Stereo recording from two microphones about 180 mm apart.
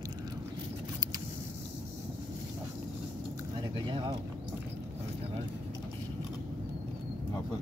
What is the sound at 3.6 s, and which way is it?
Squish, 25° right (ahead or behind).